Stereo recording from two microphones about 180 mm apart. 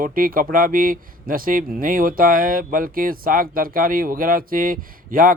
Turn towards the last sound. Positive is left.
turn(degrees=-50)  # may be behind; listen again after turning